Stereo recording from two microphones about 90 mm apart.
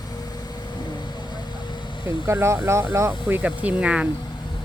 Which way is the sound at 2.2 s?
30° right (ahead or behind).